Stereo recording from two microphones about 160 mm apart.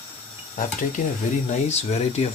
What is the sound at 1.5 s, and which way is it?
Speech, 45° left (ahead or behind).